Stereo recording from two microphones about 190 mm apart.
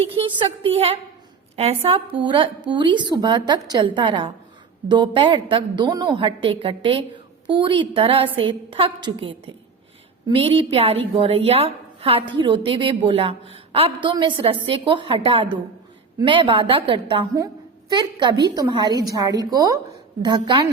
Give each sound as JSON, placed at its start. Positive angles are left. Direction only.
{"t": 0.0, "sound": "a woman's voice", "side_deg": -25}